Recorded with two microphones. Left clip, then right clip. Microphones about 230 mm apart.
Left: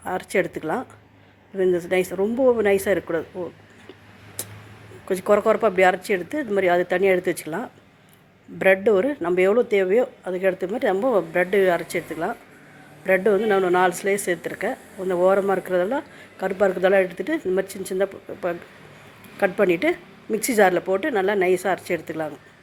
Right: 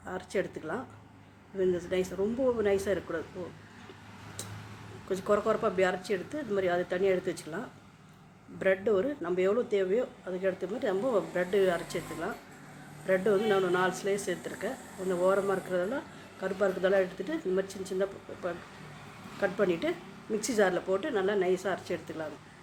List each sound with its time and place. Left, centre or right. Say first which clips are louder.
0.0 s speech: left 10 dB; left
5.0 s speech: left 10 dB; left